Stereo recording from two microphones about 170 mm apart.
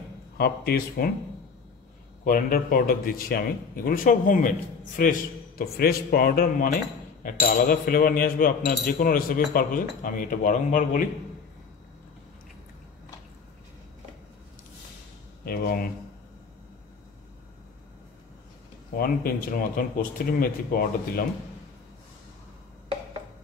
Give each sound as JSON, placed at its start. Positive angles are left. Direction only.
{"t": 0.4, "sound": "speech", "side_deg": 65}
{"t": 2.2, "sound": "speech", "side_deg": 60}
{"t": 15.4, "sound": "speech", "side_deg": 60}
{"t": 18.9, "sound": "speech", "side_deg": 60}